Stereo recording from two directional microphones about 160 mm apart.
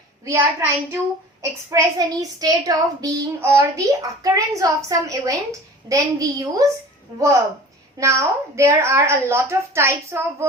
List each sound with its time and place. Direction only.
0.3 s a woman's voice: 15° right (ahead or behind)
7.9 s a woman's voice: 20° right (ahead or behind)